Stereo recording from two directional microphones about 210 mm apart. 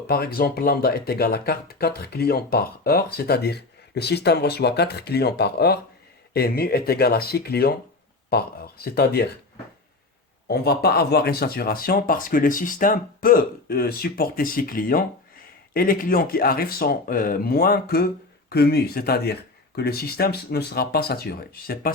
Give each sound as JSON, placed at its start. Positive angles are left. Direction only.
{"t": 0.1, "sound": "speech", "side_deg": 45}
{"t": 10.5, "sound": "speech", "side_deg": 50}